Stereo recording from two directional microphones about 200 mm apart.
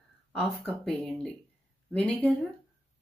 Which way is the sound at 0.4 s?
5° left (ahead or behind).